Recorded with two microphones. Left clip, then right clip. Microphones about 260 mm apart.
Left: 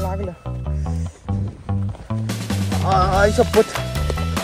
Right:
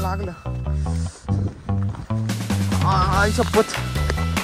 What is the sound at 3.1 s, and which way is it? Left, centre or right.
Music, right.